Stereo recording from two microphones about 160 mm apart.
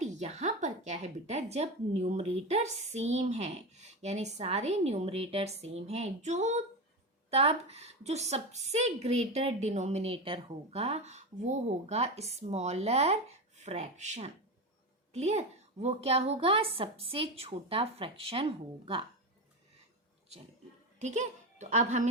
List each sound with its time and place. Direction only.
0.0 s a woman's voice: 45° right (ahead or behind)
21.0 s speech: 45° right (ahead or behind)